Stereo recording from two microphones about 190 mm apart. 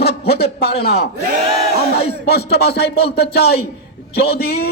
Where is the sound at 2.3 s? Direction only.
60° left (ahead or behind).